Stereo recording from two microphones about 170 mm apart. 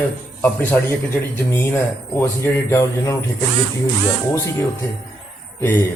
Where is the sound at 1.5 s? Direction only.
15° left (ahead or behind).